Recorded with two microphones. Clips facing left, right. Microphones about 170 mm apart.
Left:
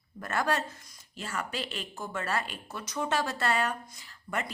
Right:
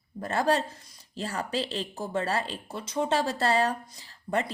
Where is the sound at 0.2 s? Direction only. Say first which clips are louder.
Right 4 dB; 30° right (ahead or behind).